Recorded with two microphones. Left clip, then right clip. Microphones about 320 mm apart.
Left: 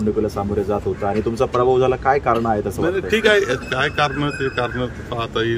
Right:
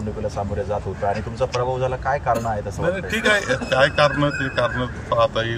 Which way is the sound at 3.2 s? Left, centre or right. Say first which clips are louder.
Left 1 dB; centre.